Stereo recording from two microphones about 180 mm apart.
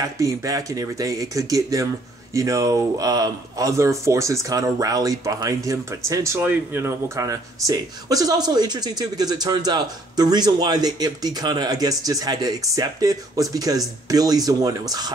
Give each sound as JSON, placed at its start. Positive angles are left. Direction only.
{"t": 0.2, "sound": "speech", "side_deg": -20}